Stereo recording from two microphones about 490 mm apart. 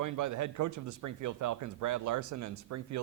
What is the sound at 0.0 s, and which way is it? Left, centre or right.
Speech, right.